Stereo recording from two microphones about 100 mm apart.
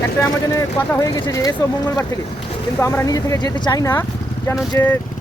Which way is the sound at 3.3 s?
45° left (ahead or behind).